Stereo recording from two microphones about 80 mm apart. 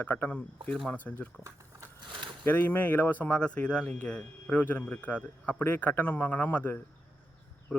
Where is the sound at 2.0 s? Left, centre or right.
Right.